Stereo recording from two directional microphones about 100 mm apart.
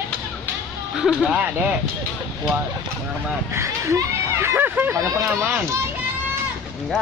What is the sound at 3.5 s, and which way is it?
Speech, 30° right (ahead or behind).